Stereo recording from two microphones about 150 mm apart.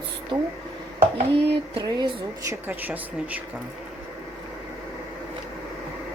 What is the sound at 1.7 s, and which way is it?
Speech, 30° right (ahead or behind).